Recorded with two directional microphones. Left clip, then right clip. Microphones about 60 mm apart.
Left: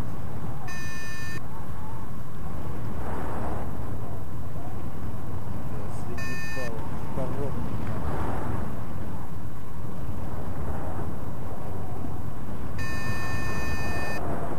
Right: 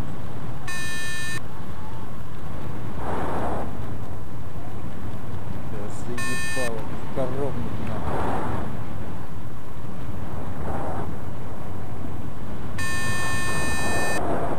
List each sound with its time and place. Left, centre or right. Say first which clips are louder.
3.2 s vehicle: right 7 dB; right
6.1 s a sound: right 7 dB; centre
7.2 s vehicle: right 6 dB; centre
8.1 s a sound: right 7 dB; centre
10.7 s vehicle: right 8 dB; centre
12.7 s vehicle: right 7 dB; centre